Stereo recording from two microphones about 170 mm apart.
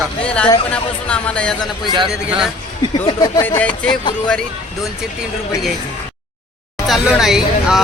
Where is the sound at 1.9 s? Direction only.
30° right (ahead or behind).